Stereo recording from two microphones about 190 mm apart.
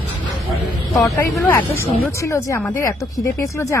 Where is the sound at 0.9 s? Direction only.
15° left (ahead or behind).